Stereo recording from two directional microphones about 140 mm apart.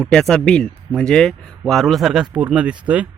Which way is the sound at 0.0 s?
5° left (ahead or behind).